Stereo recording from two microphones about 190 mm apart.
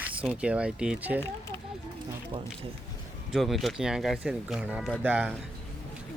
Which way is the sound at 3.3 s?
Centre (ahead or behind).